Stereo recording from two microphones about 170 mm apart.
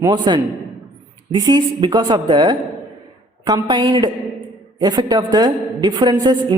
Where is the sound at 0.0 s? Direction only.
25° right (ahead or behind).